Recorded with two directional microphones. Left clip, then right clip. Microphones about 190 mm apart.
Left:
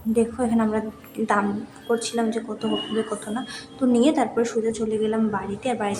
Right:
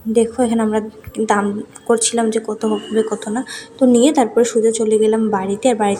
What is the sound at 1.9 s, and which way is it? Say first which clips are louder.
Speech: right 8 dB; 35° right (ahead or behind).